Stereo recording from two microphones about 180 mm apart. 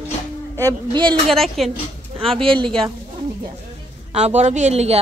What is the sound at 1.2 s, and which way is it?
Speech, centre (ahead or behind).